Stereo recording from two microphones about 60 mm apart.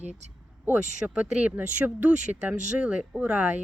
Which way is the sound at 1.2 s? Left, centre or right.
Right.